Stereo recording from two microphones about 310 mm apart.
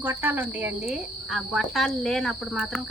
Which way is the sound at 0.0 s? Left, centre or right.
Centre.